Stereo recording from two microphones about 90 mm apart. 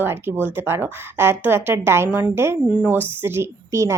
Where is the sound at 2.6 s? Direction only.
10° right (ahead or behind); by 4.0 s 35° right (ahead or behind).